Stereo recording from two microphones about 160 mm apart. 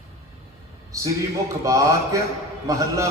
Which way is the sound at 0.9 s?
20° right (ahead or behind).